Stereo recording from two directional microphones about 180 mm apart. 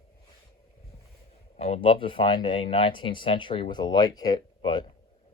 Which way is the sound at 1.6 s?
35° left (ahead or behind).